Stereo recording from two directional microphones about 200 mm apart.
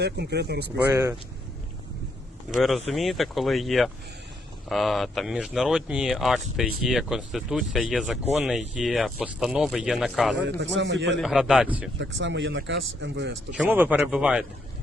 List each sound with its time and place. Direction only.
0.0 s speech: 55° right (ahead or behind)
0.9 s speech: 15° right (ahead or behind)
2.5 s speech: centre (ahead or behind)
10.3 s speech: 60° right (ahead or behind)
11.2 s speech: centre (ahead or behind)
11.9 s speech: 60° right (ahead or behind)
13.6 s speech: 10° right (ahead or behind)